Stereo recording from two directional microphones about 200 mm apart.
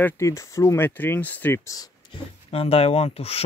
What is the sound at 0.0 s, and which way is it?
Speech, 15° left (ahead or behind).